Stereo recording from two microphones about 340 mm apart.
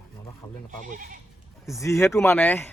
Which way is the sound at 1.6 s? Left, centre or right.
Centre.